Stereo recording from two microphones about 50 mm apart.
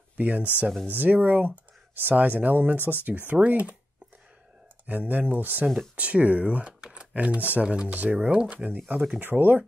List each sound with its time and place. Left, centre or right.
0.2 s speech: right
4.8 s speech: right
7.6 s speech: right